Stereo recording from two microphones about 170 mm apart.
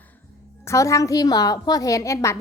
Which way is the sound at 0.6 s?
15° left (ahead or behind).